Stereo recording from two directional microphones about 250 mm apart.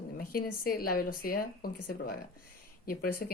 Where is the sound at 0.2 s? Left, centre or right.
Left.